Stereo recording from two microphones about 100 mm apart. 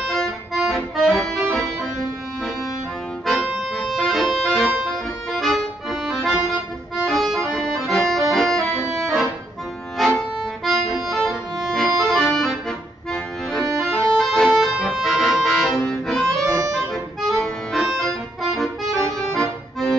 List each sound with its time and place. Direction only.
0.0 s accordion: centre (ahead or behind)
1.5 s music: 5° left (ahead or behind)
3.3 s accordion: centre (ahead or behind)
7.1 s music: centre (ahead or behind)
8.3 s accordion: centre (ahead or behind)
9.9 s music: centre (ahead or behind)
16.4 s harmonica: 30° right (ahead or behind)
16.7 s music: 5° left (ahead or behind)
19.3 s accordion: 5° left (ahead or behind)